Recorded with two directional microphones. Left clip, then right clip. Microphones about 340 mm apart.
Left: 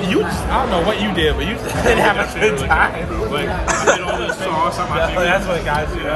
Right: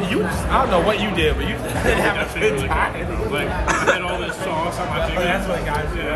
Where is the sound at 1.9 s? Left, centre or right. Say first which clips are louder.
Left 5 dB; left.